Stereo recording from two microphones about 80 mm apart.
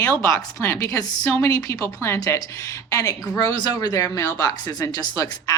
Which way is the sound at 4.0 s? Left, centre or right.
Left.